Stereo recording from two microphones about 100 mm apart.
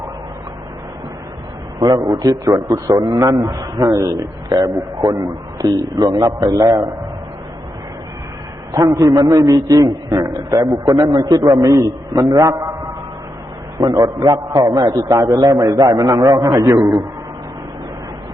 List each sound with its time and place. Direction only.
1.8 s a man's voice: 50° right (ahead or behind)
3.5 s a man's voice: 40° right (ahead or behind)
8.8 s a man's voice: 40° right (ahead or behind)
12.2 s a man's voice: 45° right (ahead or behind)
16.5 s a man's voice: 35° right (ahead or behind)